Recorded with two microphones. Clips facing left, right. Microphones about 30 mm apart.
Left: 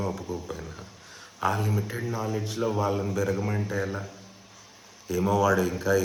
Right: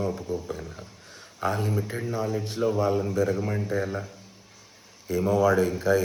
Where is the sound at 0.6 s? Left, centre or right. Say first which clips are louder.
Even; centre.